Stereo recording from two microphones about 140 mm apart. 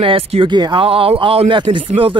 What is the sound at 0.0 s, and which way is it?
Speech, 40° right (ahead or behind).